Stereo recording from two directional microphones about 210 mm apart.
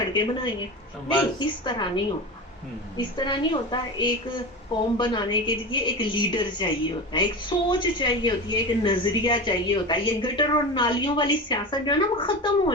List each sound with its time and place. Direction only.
0.1 s a woman's voice: 20° left (ahead or behind)
3.2 s a woman's voice: 20° left (ahead or behind)